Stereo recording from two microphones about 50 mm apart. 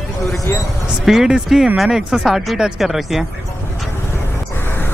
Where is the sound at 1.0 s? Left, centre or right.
Centre.